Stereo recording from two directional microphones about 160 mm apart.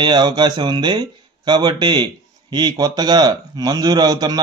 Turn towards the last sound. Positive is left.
turn(degrees=-25)  # may be behind; listen again after turning